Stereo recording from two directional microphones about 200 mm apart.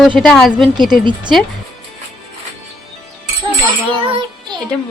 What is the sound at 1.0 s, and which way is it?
Speech, 25° right (ahead or behind).